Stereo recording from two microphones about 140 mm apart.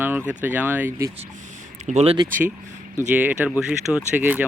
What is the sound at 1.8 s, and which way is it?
Speech, 50° right (ahead or behind).